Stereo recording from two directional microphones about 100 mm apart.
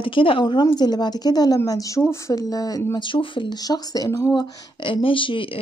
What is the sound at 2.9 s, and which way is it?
Speech, 55° left (ahead or behind).